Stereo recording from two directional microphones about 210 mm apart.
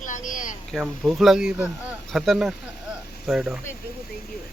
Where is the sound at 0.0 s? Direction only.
35° left (ahead or behind).